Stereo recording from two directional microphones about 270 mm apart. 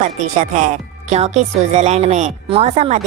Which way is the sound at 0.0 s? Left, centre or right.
Right.